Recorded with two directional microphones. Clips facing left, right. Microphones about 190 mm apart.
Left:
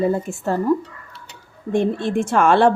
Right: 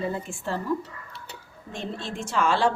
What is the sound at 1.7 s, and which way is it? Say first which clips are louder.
Speech: left 14 dB; 55° left (ahead or behind).